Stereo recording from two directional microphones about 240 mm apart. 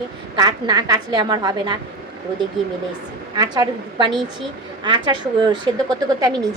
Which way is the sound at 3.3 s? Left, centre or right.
Centre.